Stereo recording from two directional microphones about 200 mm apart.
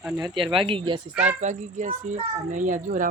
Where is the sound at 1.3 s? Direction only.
35° right (ahead or behind).